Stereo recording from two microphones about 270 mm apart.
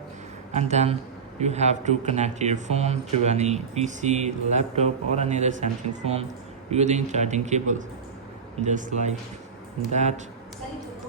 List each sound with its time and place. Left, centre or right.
0.5 s speech: right